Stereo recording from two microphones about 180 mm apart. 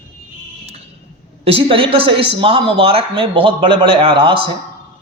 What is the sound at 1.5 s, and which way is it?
Speech, 30° right (ahead or behind).